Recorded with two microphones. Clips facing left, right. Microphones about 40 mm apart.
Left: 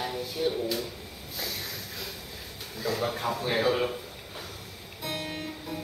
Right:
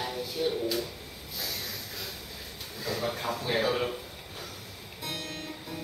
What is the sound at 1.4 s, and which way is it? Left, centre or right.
Snort, centre.